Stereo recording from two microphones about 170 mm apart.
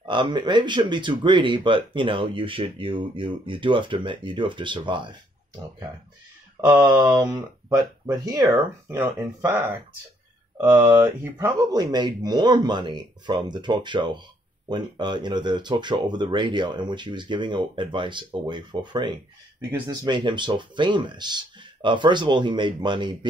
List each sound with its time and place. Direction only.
0.0 s speech: 25° right (ahead or behind)
6.6 s speech: 10° right (ahead or behind)
7.2 s speech: 25° right (ahead or behind)